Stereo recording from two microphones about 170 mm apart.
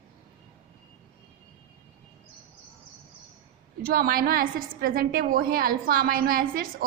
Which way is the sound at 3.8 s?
60° right (ahead or behind).